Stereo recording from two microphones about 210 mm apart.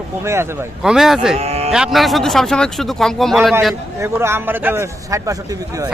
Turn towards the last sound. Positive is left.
turn(degrees=-15)  # may be behind; listen again after turning